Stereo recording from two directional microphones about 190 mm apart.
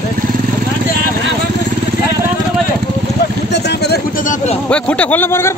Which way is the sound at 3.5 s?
60° left (ahead or behind).